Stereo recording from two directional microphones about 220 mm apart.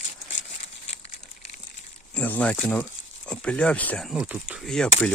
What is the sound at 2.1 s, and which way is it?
Speech, 5° left (ahead or behind).